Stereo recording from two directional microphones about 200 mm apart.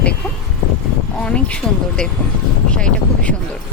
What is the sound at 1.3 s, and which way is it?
Speech, 5° left (ahead or behind).